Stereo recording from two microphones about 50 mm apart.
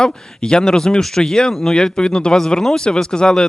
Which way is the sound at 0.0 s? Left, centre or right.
Centre.